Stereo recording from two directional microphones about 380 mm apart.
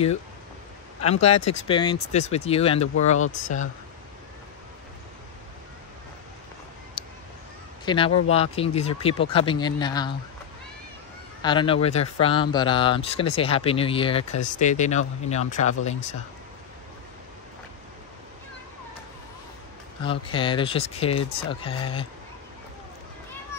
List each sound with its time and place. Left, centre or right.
1.0 s speech: centre
7.0 s a sound: centre
7.8 s speech: centre
11.4 s speech: centre
20.1 s speech: centre